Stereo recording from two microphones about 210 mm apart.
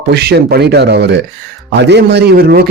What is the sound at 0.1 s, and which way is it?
A man's voice, 50° right (ahead or behind).